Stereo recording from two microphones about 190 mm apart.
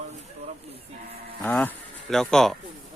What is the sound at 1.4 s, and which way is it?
Speech, 10° left (ahead or behind).